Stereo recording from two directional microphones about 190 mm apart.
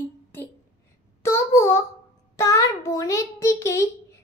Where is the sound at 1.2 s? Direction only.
15° left (ahead or behind).